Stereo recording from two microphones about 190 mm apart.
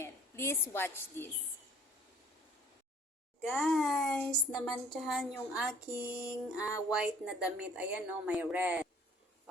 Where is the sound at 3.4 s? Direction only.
5° right (ahead or behind).